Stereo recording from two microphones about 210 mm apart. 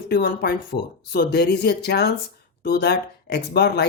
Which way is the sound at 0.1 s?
45° left (ahead or behind).